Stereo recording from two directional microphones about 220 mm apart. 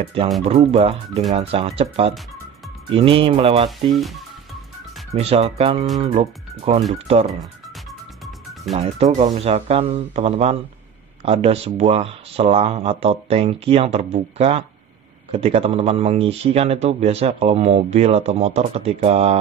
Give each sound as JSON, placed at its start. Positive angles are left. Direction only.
{"t": 0.0, "sound": "speech", "side_deg": -25}
{"t": 5.1, "sound": "speech", "side_deg": -30}
{"t": 8.7, "sound": "speech", "side_deg": -30}